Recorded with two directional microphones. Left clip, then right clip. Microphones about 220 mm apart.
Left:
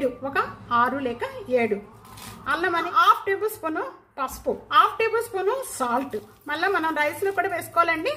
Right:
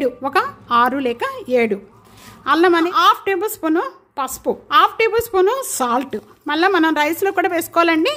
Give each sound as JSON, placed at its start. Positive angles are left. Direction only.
{"t": 0.0, "sound": "a woman's voice", "side_deg": -50}